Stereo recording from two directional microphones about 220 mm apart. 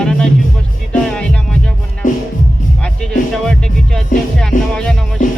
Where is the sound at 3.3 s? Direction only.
5° left (ahead or behind).